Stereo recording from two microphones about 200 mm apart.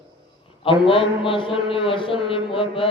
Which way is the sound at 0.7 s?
25° left (ahead or behind).